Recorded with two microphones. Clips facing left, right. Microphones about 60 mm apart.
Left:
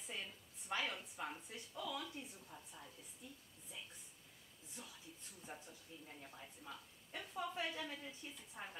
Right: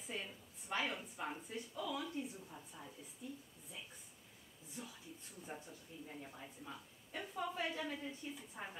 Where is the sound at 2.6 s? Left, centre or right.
Centre.